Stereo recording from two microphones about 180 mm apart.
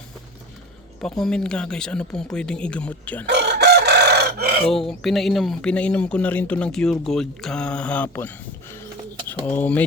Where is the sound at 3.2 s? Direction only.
70° right (ahead or behind).